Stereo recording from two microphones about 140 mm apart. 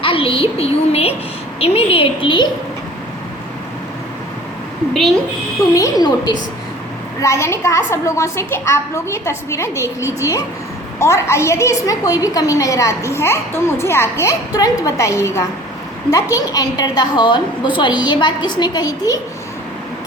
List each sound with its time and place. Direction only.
0.0 s a woman's voice: 40° left (ahead or behind)
5.7 s a woman's voice: 25° left (ahead or behind)